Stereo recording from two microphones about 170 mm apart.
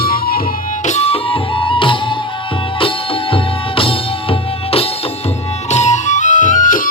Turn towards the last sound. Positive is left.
turn(degrees=50)  # may be behind; listen again after turning